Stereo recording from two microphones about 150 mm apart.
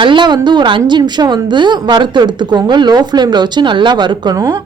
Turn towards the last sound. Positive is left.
turn(degrees=-25)  # may be behind; listen again after turning